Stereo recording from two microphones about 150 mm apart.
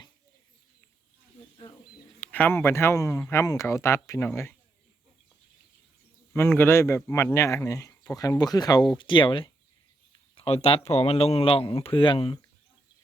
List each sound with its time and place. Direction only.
2.2 s speech: 10° left (ahead or behind)
6.3 s speech: 15° left (ahead or behind); by 12.4 s 30° left (ahead or behind)